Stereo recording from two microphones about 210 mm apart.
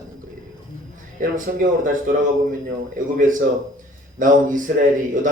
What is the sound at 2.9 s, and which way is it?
Speech, 40° right (ahead or behind).